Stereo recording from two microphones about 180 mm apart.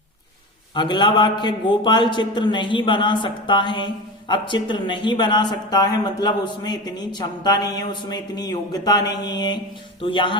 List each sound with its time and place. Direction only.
0.7 s a man's voice: 25° left (ahead or behind)